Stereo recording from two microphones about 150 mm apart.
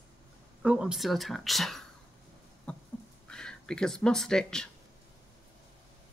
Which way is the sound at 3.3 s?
5° left (ahead or behind).